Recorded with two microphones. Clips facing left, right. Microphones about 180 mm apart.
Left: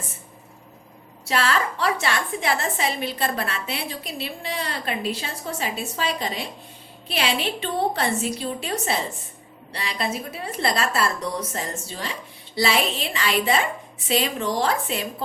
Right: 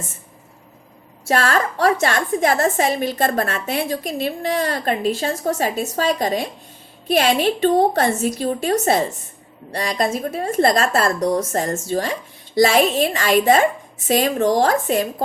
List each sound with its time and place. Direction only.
1.2 s a woman's voice: 45° right (ahead or behind)